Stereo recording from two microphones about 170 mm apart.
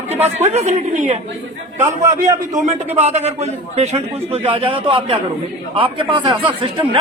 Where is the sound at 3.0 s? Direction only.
40° right (ahead or behind).